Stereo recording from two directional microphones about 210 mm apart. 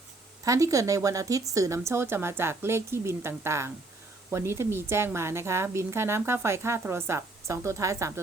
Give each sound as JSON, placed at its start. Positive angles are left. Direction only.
{"t": 0.4, "sound": "speech", "side_deg": -15}